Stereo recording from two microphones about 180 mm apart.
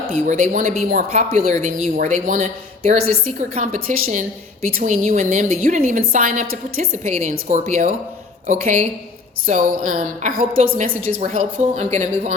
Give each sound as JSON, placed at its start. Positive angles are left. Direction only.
{"t": 0.1, "sound": "a woman's voice", "side_deg": -45}
{"t": 6.9, "sound": "a woman's voice", "side_deg": -40}